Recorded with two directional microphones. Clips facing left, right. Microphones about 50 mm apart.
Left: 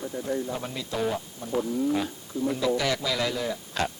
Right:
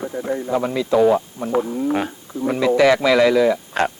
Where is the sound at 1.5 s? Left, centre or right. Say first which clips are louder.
Right 5 dB; right.